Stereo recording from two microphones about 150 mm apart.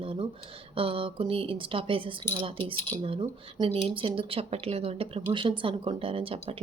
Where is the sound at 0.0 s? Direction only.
40° right (ahead or behind).